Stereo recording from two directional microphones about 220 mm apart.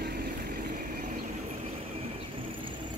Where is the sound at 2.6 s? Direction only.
20° right (ahead or behind).